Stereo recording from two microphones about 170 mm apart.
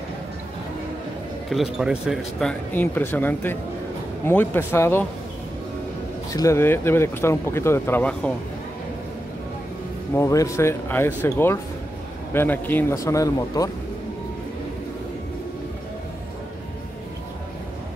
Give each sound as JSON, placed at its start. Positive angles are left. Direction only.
{"t": 1.5, "sound": "speech", "side_deg": 0}
{"t": 2.7, "sound": "speech", "side_deg": 10}
{"t": 6.3, "sound": "speech", "side_deg": 15}
{"t": 10.1, "sound": "speech", "side_deg": 20}